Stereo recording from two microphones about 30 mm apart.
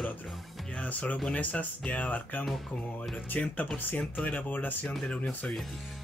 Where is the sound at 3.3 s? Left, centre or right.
Left.